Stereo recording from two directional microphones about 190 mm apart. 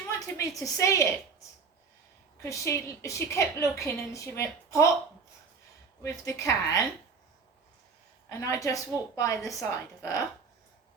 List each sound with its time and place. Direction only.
0.1 s a woman's voice: 15° left (ahead or behind)
2.4 s a woman's voice: 15° left (ahead or behind)
6.0 s a woman's voice: 15° left (ahead or behind)
8.3 s a woman's voice: 15° left (ahead or behind)